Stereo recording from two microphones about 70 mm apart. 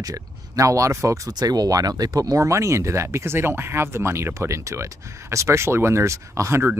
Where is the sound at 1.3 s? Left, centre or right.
Right.